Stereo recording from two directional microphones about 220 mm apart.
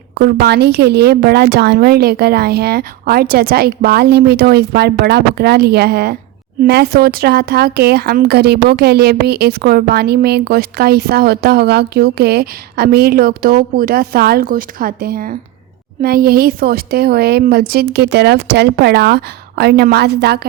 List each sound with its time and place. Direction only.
0.1 s speech: 45° right (ahead or behind)